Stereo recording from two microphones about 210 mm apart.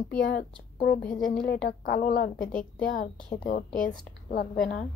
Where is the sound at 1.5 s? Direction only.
45° left (ahead or behind).